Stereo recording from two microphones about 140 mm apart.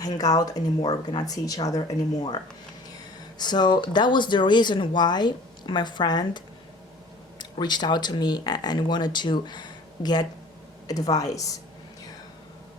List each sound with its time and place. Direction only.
0.0 s speech: 25° left (ahead or behind)
3.3 s speech: 30° left (ahead or behind)